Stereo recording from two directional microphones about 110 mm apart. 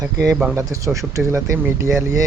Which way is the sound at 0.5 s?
30° right (ahead or behind).